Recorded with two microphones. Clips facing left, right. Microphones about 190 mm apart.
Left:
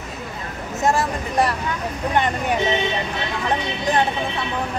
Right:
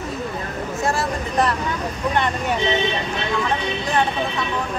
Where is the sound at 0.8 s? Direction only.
15° left (ahead or behind).